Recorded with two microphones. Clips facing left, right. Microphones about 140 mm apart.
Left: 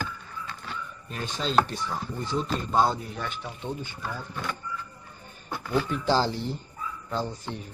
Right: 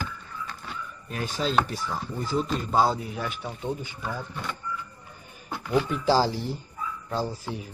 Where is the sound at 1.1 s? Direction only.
5° right (ahead or behind).